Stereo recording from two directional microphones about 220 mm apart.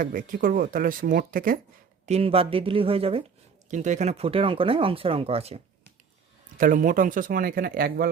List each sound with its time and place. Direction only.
0.0 s speech: 40° right (ahead or behind)
2.0 s speech: 25° right (ahead or behind)
6.6 s speech: 40° right (ahead or behind)